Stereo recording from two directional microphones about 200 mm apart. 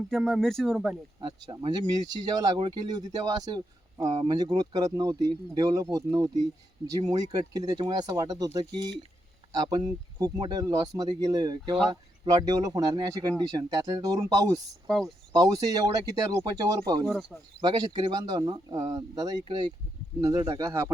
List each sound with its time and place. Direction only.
0.1 s speech: centre (ahead or behind)
1.2 s speech: 25° right (ahead or behind)
7.0 s speech: 30° right (ahead or behind)
14.8 s speech: centre (ahead or behind)
15.3 s speech: 15° right (ahead or behind)